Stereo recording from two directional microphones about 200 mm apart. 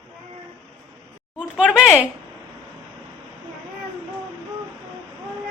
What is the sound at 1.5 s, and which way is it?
Speech, 5° right (ahead or behind).